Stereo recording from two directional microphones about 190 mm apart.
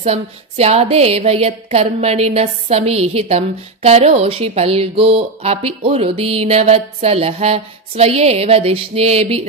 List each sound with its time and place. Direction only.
0.0 s a woman's voice: 35° right (ahead or behind)